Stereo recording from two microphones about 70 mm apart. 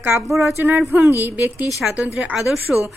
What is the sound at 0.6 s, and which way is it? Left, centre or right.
Speech, right.